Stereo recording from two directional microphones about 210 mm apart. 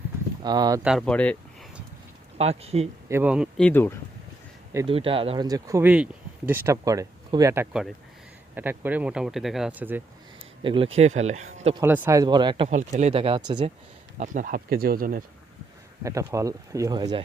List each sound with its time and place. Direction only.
0.4 s speech: 20° right (ahead or behind)
0.8 s speech: centre (ahead or behind)
2.4 s speech: 30° right (ahead or behind)
3.1 s speech: 10° right (ahead or behind)
3.6 s speech: 10° left (ahead or behind)
4.9 s speech: 25° right (ahead or behind); by 10.0 s 10° right (ahead or behind)
10.6 s speech: 25° right (ahead or behind)
11.8 s speech: 10° right (ahead or behind)
12.7 s speech: 35° right (ahead or behind)
14.2 s speech: 40° right (ahead or behind)
16.0 s speech: 15° right (ahead or behind)